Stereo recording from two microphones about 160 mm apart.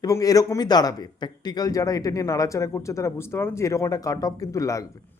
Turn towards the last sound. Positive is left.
turn(degrees=20)  # may be behind; listen again after turning